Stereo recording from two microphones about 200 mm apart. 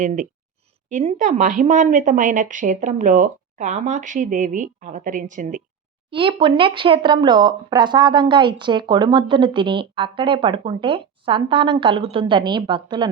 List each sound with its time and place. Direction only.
0.0 s speech: 40° right (ahead or behind)
6.1 s speech: 25° right (ahead or behind)